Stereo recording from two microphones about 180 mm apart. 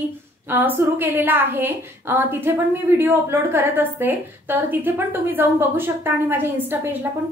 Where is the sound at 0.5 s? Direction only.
10° right (ahead or behind).